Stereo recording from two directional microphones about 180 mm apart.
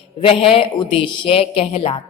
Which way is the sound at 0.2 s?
30° left (ahead or behind).